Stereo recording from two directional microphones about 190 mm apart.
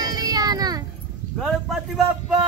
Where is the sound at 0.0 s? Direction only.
20° right (ahead or behind).